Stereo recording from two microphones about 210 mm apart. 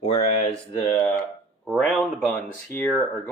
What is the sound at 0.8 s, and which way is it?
Speech, 15° left (ahead or behind).